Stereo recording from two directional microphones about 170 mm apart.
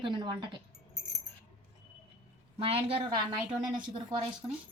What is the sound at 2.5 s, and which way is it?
A woman's voice, 35° right (ahead or behind).